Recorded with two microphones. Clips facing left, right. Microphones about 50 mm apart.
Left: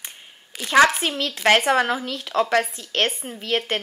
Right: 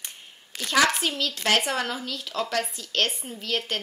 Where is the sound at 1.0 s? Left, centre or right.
Left.